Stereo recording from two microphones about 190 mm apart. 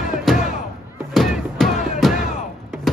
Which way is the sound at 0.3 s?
Centre (ahead or behind).